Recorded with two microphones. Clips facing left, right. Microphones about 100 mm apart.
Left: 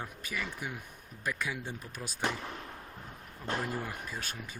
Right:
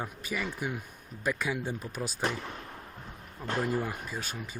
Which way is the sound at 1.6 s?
30° right (ahead or behind).